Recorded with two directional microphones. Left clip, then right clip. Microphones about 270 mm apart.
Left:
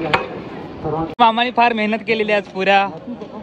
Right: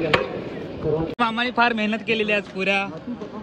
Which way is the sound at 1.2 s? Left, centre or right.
Centre.